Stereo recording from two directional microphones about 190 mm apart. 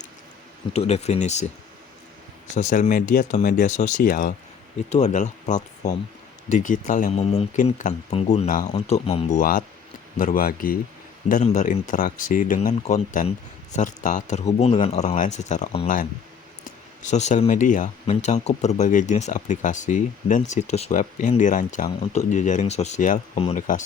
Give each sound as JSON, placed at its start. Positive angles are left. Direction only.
{"t": 0.7, "sound": "speech", "side_deg": 35}
{"t": 2.6, "sound": "speech", "side_deg": 40}
{"t": 4.9, "sound": "speech", "side_deg": 35}
{"t": 17.0, "sound": "speech", "side_deg": 40}